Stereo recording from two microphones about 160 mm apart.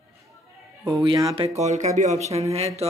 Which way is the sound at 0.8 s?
25° right (ahead or behind).